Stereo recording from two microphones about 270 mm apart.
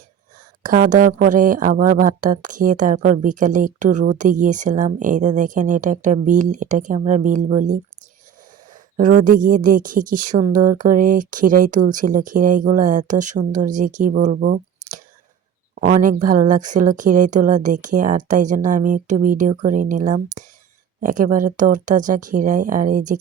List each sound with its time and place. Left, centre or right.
0.6 s speech: right
9.0 s speech: right